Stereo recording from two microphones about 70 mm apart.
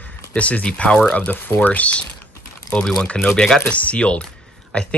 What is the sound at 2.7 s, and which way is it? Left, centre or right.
Speech, centre.